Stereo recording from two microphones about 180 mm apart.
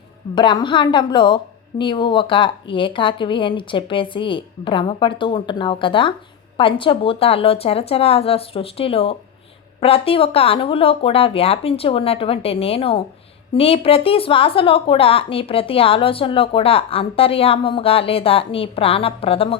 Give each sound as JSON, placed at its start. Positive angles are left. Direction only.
{"t": 0.3, "sound": "a woman's voice", "side_deg": 25}